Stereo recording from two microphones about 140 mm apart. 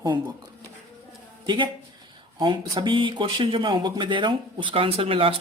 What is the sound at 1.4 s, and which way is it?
A man's voice, 35° right (ahead or behind).